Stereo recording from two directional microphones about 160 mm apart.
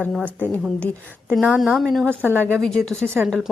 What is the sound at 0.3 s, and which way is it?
A woman's voice, 10° right (ahead or behind).